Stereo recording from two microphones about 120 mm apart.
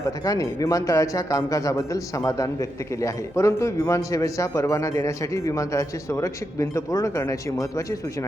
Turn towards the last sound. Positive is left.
turn(degrees=30)  # may be behind; listen again after turning